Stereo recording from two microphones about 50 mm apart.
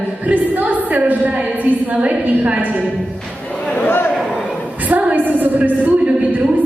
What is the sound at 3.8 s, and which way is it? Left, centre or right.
Speech, left.